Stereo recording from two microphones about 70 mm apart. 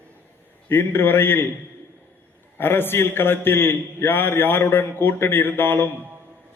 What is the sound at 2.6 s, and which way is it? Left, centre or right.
A man's voice, left.